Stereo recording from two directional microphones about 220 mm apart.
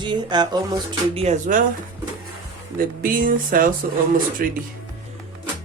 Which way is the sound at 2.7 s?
40° right (ahead or behind).